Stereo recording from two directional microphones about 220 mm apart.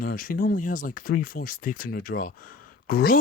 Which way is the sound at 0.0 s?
40° left (ahead or behind).